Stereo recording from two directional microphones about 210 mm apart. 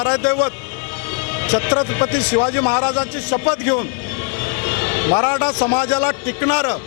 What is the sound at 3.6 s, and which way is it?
Vehicle, 15° left (ahead or behind).